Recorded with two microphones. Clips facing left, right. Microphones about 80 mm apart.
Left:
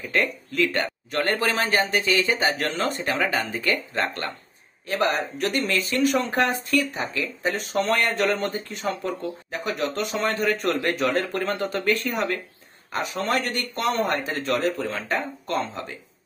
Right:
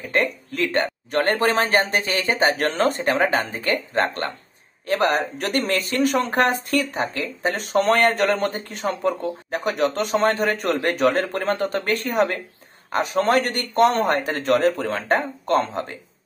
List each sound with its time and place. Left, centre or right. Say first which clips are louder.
0.0 s speech: right 2 dB; right
4.8 s speech: right 4 dB; right